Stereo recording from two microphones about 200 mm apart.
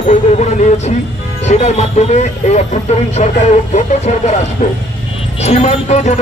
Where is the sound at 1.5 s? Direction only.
35° left (ahead or behind).